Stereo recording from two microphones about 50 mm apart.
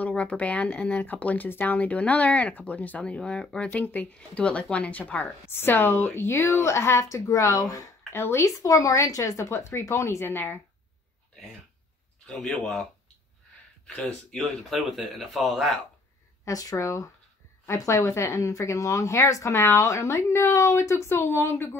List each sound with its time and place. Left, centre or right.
0.0 s speech: left
3.0 s speech: left
5.5 s speech: left
6.3 s speech: left
8.1 s speech: left
9.6 s a woman's voice: left
10.2 s speech: left
12.3 s speech: centre
14.3 s speech: centre
16.4 s speech: left
20.2 s a woman's voice: left
21.1 s speech: left